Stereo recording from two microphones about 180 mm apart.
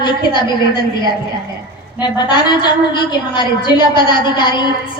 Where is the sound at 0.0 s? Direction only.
25° left (ahead or behind).